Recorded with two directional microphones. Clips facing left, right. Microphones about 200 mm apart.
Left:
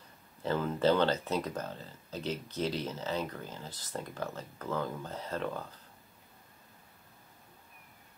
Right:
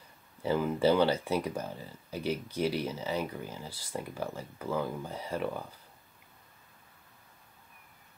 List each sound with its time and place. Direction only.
0.4 s speech: 10° right (ahead or behind)